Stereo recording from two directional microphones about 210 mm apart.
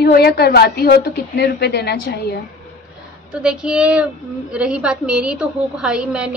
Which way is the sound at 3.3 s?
5° right (ahead or behind).